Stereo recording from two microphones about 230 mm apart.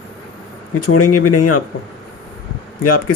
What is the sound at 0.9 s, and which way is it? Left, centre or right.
Speech, left.